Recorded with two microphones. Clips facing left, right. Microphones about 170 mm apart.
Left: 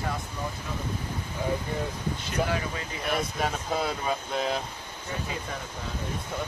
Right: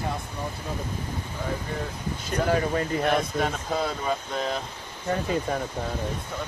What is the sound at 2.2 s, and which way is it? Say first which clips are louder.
Speech: right 6 dB; 45° right (ahead or behind).